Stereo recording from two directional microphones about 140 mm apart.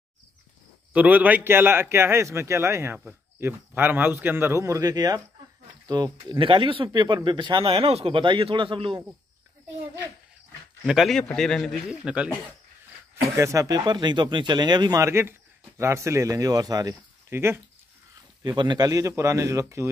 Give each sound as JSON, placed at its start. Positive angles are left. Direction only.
{"t": 0.9, "sound": "a man's voice", "side_deg": -10}
{"t": 10.9, "sound": "a man's voice", "side_deg": 0}
{"t": 13.4, "sound": "speech", "side_deg": -20}
{"t": 18.4, "sound": "speech", "side_deg": -30}